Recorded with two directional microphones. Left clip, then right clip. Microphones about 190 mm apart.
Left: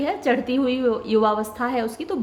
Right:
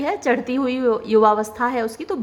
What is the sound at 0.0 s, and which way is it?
A woman's voice, 20° right (ahead or behind).